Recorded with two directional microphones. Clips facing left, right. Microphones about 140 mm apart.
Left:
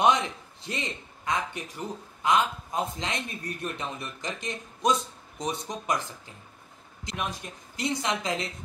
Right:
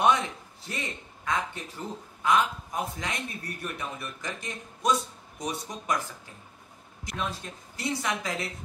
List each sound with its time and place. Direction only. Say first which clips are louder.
0.0 s a man's voice: left 1 dB; 20° left (ahead or behind)
7.1 s a man's voice: even; 15° left (ahead or behind)